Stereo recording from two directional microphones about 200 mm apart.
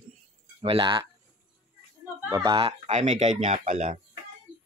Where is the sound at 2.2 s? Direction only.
15° right (ahead or behind); by 4.0 s 35° right (ahead or behind).